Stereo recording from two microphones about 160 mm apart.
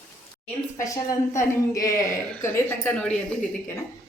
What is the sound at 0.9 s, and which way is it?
A woman's voice, 20° left (ahead or behind).